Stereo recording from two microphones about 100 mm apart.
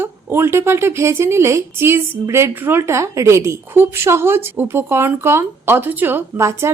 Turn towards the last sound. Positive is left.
turn(degrees=-30)  # may be behind; listen again after turning